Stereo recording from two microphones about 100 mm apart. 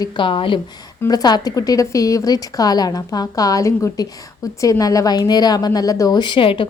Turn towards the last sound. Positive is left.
turn(degrees=60)  # may be behind; listen again after turning